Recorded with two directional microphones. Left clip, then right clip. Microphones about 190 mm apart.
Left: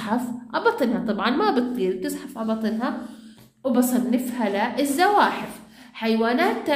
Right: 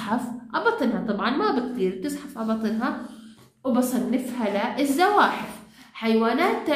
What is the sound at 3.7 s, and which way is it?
A woman's voice, 35° left (ahead or behind).